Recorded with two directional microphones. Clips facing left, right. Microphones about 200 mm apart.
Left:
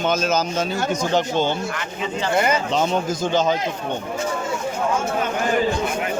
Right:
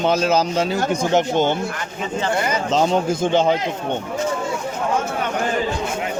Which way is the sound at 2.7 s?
35° right (ahead or behind).